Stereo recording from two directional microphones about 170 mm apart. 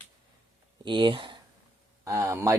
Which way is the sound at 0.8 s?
30° right (ahead or behind).